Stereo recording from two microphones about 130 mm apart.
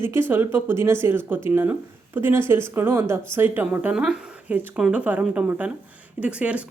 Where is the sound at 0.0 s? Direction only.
15° right (ahead or behind).